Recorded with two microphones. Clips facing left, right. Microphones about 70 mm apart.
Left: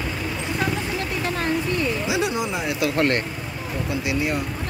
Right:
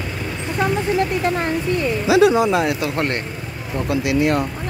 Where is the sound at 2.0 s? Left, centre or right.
Right.